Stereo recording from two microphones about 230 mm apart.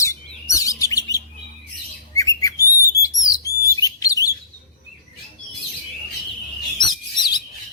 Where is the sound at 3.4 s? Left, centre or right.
Centre.